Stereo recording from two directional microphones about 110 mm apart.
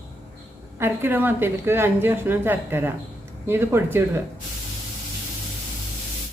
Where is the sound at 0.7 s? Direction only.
20° right (ahead or behind).